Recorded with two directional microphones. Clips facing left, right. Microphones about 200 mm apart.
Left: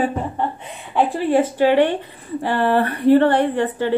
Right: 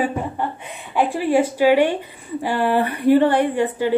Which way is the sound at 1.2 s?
10° right (ahead or behind).